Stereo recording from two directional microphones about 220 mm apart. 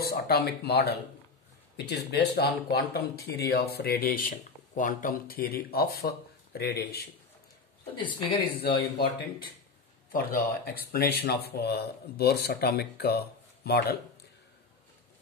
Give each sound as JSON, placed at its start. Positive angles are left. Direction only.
{"t": 0.0, "sound": "speech", "side_deg": 45}
{"t": 8.0, "sound": "speech", "side_deg": 20}
{"t": 8.5, "sound": "speech", "side_deg": 45}